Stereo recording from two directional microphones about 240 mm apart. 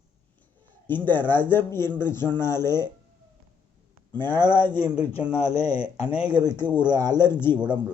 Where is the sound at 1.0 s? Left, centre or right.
Centre.